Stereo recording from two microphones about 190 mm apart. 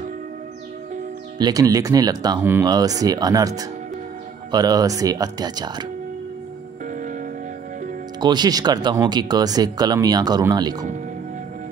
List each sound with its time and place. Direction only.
1.4 s speech: 20° right (ahead or behind)
8.2 s speech: 20° right (ahead or behind)